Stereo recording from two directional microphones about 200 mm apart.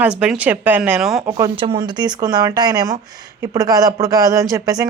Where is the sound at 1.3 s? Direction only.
25° right (ahead or behind).